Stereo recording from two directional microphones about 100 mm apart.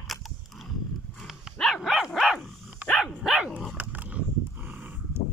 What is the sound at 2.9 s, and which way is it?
Dog, 5° left (ahead or behind).